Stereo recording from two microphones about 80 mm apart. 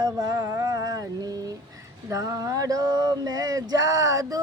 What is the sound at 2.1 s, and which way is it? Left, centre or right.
Male singing, right.